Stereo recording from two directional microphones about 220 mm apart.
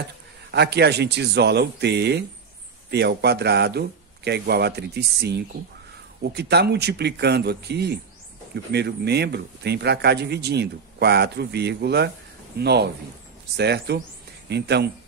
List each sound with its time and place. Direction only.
0.5 s a man's voice: 50° right (ahead or behind)